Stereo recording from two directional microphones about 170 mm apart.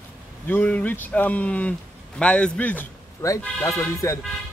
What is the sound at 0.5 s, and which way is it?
Speech, 10° left (ahead or behind).